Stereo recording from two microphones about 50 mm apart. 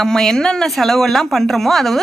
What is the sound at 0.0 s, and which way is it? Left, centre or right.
Speech, centre.